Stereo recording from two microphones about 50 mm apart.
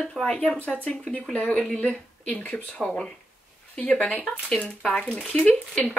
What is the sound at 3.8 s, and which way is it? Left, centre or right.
Speech, left.